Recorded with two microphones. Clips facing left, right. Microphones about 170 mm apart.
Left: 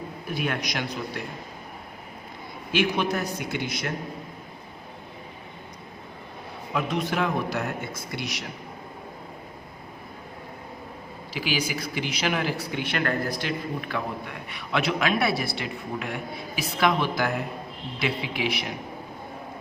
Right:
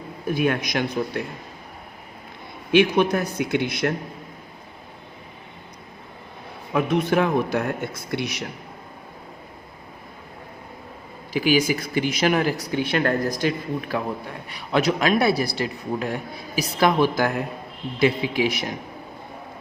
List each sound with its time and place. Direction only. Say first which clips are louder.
0.3 s speech: right 7 dB; 50° right (ahead or behind)
2.7 s speech: right 7 dB; 55° right (ahead or behind)
6.7 s speech: right 6 dB; 55° right (ahead or behind)
11.3 s speech: right 9 dB; 50° right (ahead or behind)